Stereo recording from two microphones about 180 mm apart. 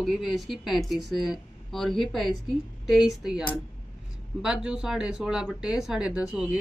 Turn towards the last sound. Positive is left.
turn(degrees=-5)  # may be behind; listen again after turning